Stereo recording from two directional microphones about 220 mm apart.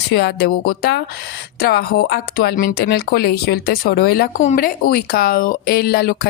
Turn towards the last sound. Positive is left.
turn(degrees=45)  # may be behind; listen again after turning